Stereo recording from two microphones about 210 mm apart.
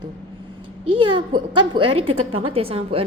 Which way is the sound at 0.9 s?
25° right (ahead or behind).